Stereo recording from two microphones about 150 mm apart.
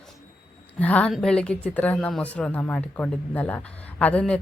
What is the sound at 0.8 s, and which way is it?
Speech, 10° left (ahead or behind).